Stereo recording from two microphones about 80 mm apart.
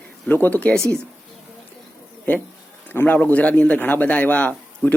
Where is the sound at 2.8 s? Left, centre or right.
Left.